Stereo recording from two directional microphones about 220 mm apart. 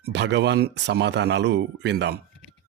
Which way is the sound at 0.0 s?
50° right (ahead or behind).